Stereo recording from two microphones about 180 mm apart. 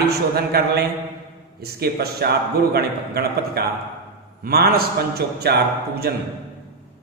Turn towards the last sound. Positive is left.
turn(degrees=-65)  # may be behind; listen again after turning